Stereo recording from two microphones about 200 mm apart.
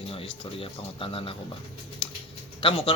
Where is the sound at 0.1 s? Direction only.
30° left (ahead or behind).